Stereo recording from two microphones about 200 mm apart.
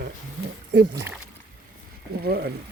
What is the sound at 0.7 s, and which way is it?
Speech, 55° right (ahead or behind).